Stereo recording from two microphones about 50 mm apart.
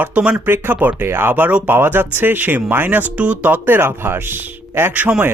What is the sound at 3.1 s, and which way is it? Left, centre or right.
Speech, right.